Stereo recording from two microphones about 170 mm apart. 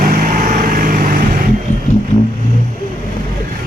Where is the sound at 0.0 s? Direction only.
55° right (ahead or behind).